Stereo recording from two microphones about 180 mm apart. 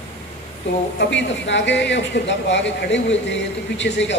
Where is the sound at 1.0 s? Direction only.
85° left.